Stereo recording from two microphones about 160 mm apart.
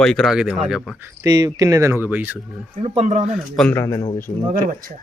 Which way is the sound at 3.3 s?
Centre (ahead or behind).